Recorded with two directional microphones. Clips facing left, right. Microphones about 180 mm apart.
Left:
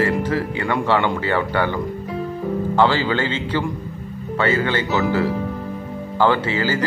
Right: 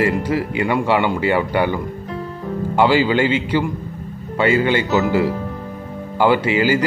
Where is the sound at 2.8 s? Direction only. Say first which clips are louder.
Right 4 dB; 10° right (ahead or behind).